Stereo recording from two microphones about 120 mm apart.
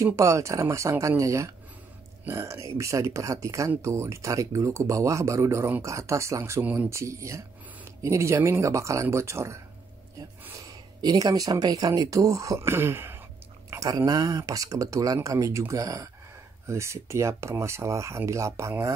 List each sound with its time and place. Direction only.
0.0 s speech: 25° right (ahead or behind)
13.7 s speech: 30° right (ahead or behind)